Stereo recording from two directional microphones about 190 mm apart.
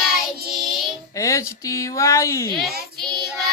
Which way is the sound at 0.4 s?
Centre (ahead or behind).